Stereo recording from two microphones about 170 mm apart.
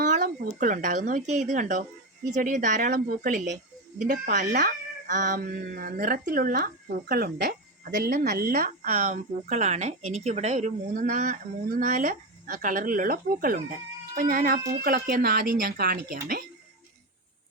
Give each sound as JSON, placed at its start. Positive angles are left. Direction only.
{"t": 0.0, "sound": "speech", "side_deg": -50}
{"t": 8.5, "sound": "speech", "side_deg": -45}